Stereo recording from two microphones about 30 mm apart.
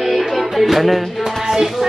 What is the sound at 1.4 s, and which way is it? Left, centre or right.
Music, centre.